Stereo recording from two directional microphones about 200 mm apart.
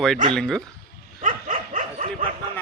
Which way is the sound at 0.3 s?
5° left (ahead or behind).